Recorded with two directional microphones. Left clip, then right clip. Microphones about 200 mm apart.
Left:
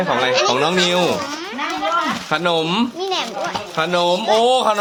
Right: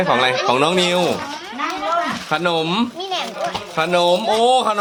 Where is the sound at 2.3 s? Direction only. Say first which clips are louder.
Even; centre (ahead or behind).